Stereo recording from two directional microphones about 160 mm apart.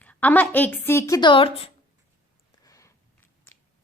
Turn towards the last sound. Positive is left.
turn(degrees=20)  # may be behind; listen again after turning